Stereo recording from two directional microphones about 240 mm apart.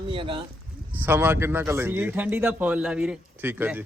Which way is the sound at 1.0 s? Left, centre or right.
Centre.